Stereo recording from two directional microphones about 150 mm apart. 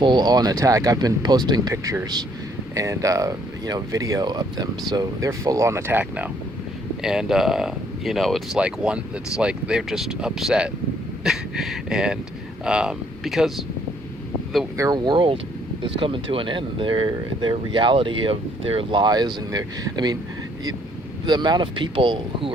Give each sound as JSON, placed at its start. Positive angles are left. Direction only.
{"t": 0.0, "sound": "a man's voice", "side_deg": -30}
{"t": 14.8, "sound": "speech", "side_deg": -25}
{"t": 21.2, "sound": "speech", "side_deg": -30}